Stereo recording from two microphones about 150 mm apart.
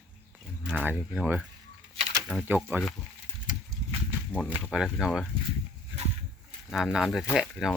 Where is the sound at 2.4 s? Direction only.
10° right (ahead or behind).